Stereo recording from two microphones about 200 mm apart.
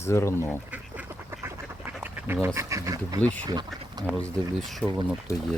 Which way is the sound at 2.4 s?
15° right (ahead or behind).